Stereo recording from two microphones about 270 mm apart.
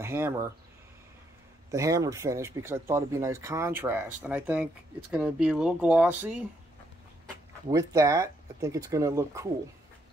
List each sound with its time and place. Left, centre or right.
0.0 s a sound: centre
1.7 s speech: centre
7.7 s speech: centre